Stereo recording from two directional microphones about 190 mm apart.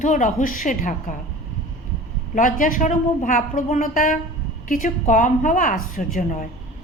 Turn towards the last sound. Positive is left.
turn(degrees=45)  # may be behind; listen again after turning